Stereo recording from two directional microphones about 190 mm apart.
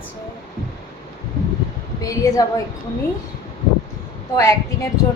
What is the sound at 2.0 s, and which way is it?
Speech, 20° left (ahead or behind).